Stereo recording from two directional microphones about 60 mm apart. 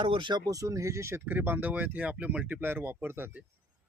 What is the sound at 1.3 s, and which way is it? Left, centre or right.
Speech, right.